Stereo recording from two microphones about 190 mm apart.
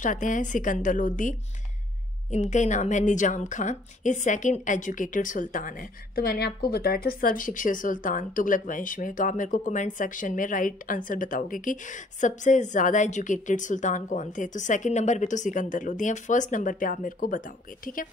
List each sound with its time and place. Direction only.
0.0 s a woman's voice: 40° left (ahead or behind)
2.3 s a woman's voice: 40° left (ahead or behind)